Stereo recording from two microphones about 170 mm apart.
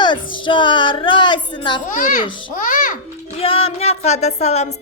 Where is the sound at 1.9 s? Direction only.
50° left (ahead or behind).